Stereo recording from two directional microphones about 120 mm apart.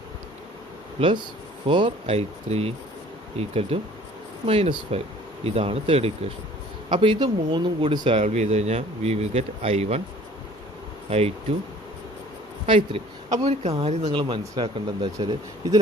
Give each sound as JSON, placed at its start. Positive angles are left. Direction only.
{"t": 0.9, "sound": "speech", "side_deg": -45}
{"t": 6.9, "sound": "speech", "side_deg": -45}
{"t": 8.2, "sound": "speech", "side_deg": -70}
{"t": 11.1, "sound": "speech", "side_deg": -60}
{"t": 12.6, "sound": "speech", "side_deg": -50}
{"t": 13.5, "sound": "speech", "side_deg": -60}